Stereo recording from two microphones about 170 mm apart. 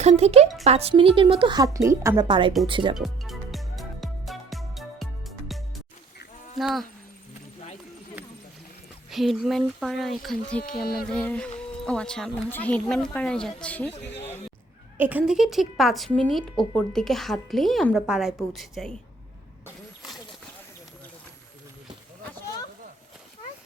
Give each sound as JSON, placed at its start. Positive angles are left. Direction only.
{"t": 0.0, "sound": "a woman's voice", "side_deg": -40}
{"t": 2.2, "sound": "a woman's voice", "side_deg": -30}
{"t": 2.9, "sound": "music", "side_deg": 0}
{"t": 6.6, "sound": "speech", "side_deg": 0}
{"t": 9.0, "sound": "speech", "side_deg": 0}
{"t": 11.1, "sound": "a sound", "side_deg": 10}
{"t": 11.9, "sound": "speech", "side_deg": 5}
{"t": 14.9, "sound": "speech", "side_deg": -10}